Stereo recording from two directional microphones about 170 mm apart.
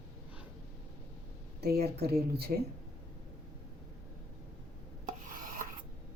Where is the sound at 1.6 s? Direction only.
70° right (ahead or behind).